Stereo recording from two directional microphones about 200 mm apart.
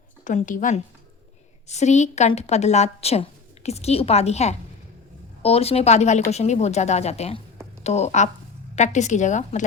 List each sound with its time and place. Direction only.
0.3 s a woman's voice: 40° left (ahead or behind)